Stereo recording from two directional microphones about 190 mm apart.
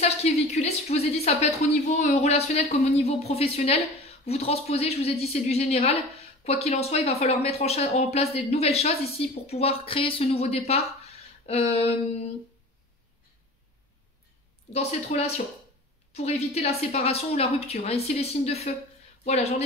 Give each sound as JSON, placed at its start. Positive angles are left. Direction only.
{"t": 0.0, "sound": "speech", "side_deg": 35}
{"t": 14.7, "sound": "speech", "side_deg": 35}